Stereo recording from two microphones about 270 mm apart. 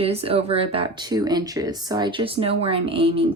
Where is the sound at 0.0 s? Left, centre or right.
Right.